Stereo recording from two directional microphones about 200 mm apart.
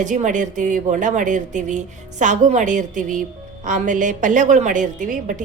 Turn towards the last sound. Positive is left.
turn(degrees=-40)  # may be behind; listen again after turning